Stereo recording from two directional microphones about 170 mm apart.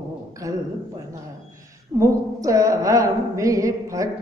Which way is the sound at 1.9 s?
20° right (ahead or behind).